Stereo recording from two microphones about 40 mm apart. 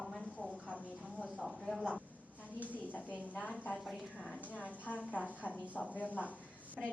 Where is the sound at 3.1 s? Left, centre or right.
Left.